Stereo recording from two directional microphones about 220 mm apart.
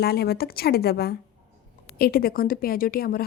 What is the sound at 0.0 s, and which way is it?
A woman's voice, 45° left (ahead or behind).